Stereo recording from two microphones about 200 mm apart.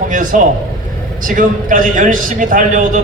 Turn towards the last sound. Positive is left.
turn(degrees=-40)  # may be behind; listen again after turning